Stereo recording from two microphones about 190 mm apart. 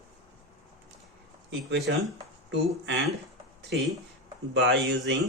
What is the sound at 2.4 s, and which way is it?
Speech, 65° right (ahead or behind).